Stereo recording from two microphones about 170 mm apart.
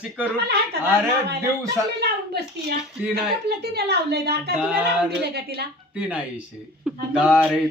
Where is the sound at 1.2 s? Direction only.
75° right (ahead or behind).